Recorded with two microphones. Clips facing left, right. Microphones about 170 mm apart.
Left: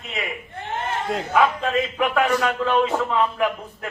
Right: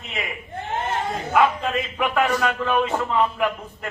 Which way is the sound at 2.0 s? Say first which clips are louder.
Right 1 dB; centre (ahead or behind).